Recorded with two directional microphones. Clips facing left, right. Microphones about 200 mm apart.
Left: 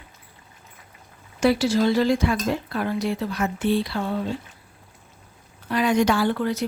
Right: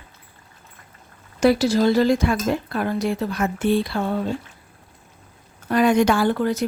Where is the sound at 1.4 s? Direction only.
40° right (ahead or behind).